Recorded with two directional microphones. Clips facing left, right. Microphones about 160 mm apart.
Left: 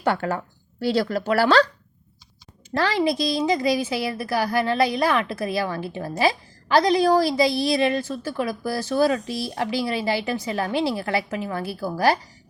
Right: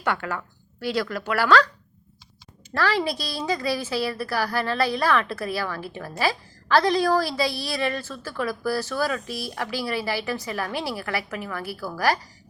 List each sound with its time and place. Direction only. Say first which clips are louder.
0.0 s a woman's voice: left 4 dB; 35° left (ahead or behind)
2.7 s a woman's voice: left 3 dB; 20° left (ahead or behind)